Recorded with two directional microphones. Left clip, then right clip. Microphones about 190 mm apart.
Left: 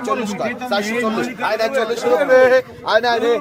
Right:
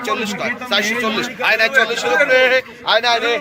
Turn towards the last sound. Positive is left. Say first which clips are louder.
# even
turn(degrees=40)  # may be behind; listen again after turning